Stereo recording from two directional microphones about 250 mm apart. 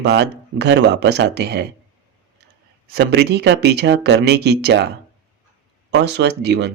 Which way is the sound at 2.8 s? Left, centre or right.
Right.